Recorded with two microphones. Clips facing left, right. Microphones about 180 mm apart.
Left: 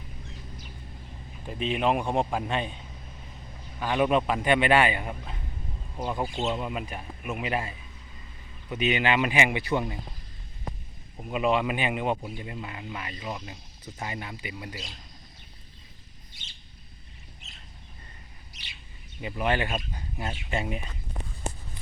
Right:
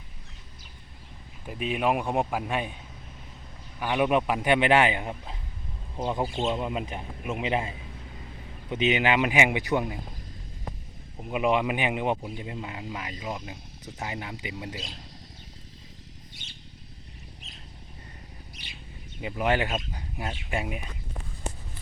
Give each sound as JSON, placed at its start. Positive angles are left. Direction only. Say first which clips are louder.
{"t": 1.5, "sound": "speech", "louder": "even", "side_deg": -10}
{"t": 3.8, "sound": "speech", "louder": "even", "side_deg": -10}
{"t": 8.7, "sound": "speech", "louder": "right 1 dB", "side_deg": -20}
{"t": 11.2, "sound": "speech", "louder": "even", "side_deg": -15}
{"t": 19.2, "sound": "speech", "louder": "right 1 dB", "side_deg": -15}